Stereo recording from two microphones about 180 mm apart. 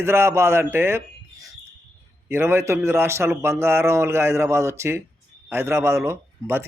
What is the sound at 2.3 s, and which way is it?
A man's voice, 15° right (ahead or behind).